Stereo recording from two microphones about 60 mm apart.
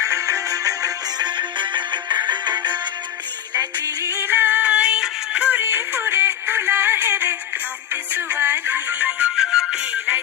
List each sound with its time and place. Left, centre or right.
0.0 s music: right
3.6 s music: right
4.1 s music: right; by 5.4 s centre
5.4 s music: right
5.6 s music: right
8.4 s music: right
9.4 s music: centre